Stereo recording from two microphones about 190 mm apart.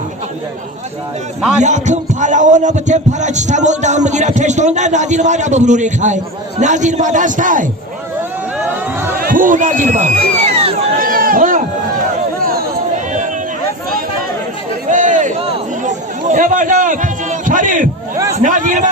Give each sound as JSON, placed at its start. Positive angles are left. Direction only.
{"t": 1.6, "sound": "speech", "side_deg": -40}
{"t": 9.1, "sound": "speech", "side_deg": -50}
{"t": 11.0, "sound": "a sound", "side_deg": -50}
{"t": 14.8, "sound": "chatter", "side_deg": -40}
{"t": 18.3, "sound": "speech", "side_deg": -40}